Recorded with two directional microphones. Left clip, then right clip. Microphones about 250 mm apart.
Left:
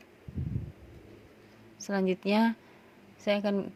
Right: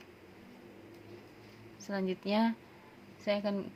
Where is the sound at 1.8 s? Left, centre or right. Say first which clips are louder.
Left 6 dB; left.